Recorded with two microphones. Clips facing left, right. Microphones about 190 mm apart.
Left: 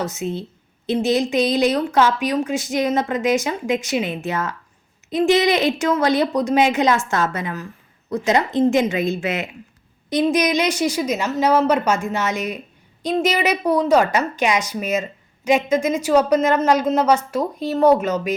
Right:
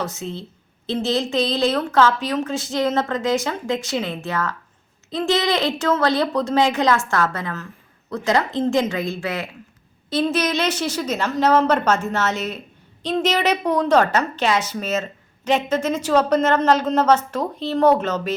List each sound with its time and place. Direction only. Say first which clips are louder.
0.0 s a woman's voice: left 3 dB; 20° left (ahead or behind)